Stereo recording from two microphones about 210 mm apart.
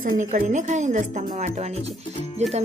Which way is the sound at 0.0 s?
40° right (ahead or behind).